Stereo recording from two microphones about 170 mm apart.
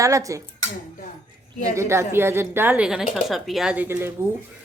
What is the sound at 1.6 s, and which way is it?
A woman's voice, 15° right (ahead or behind).